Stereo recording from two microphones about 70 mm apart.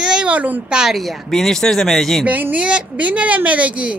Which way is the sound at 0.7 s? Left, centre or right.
Centre.